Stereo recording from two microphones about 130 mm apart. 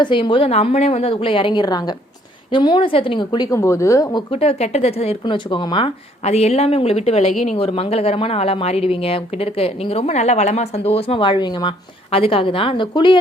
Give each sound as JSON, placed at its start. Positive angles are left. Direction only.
{"t": 0.0, "sound": "a woman's voice", "side_deg": 40}
{"t": 4.3, "sound": "speech", "side_deg": 50}
{"t": 5.2, "sound": "a woman's voice", "side_deg": 35}
{"t": 6.2, "sound": "speech", "side_deg": 55}
{"t": 12.1, "sound": "speech", "side_deg": 45}